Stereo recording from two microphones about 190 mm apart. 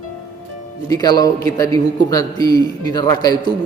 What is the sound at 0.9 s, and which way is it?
A man's voice, 20° left (ahead or behind).